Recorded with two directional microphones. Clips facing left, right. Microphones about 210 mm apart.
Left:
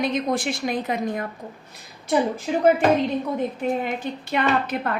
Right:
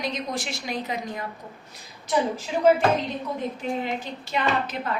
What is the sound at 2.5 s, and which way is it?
Speech, 50° left (ahead or behind).